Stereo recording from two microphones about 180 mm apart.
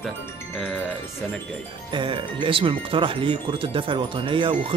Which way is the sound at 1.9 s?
25° right (ahead or behind).